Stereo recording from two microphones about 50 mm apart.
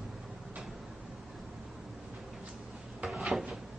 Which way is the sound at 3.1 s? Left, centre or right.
Centre.